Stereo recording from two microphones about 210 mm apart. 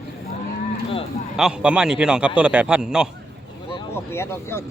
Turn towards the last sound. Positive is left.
turn(degrees=10)  # may be behind; listen again after turning